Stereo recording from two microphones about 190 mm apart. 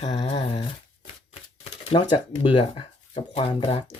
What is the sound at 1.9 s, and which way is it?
Speech, 25° left (ahead or behind).